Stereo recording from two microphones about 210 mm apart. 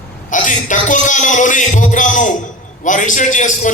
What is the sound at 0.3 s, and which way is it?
A man's voice, 40° left (ahead or behind).